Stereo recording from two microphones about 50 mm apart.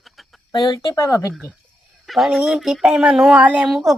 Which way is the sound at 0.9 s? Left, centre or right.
Left.